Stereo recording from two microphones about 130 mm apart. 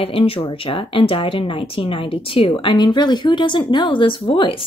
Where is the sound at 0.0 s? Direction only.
45° left (ahead or behind).